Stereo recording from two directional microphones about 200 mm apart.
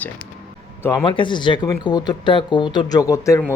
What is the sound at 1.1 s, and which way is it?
Speech, 25° left (ahead or behind).